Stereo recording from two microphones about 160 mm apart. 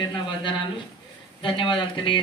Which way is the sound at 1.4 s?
30° left (ahead or behind).